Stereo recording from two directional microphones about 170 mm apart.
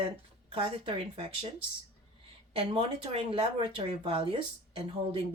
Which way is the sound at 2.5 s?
35° right (ahead or behind).